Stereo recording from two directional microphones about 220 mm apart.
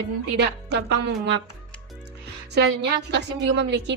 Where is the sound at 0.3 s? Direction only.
50° right (ahead or behind).